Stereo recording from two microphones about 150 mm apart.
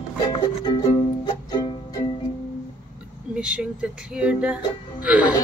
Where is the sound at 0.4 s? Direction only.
30° left (ahead or behind).